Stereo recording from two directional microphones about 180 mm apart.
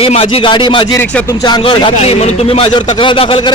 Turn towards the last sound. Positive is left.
turn(degrees=30)  # may be behind; listen again after turning